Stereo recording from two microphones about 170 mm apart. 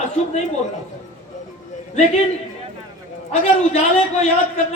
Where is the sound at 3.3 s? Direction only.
40° left (ahead or behind).